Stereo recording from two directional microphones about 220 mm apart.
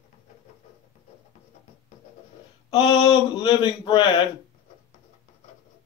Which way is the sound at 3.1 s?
20° left (ahead or behind).